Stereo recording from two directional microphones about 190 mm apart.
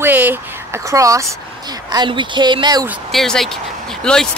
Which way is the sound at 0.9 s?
15° right (ahead or behind).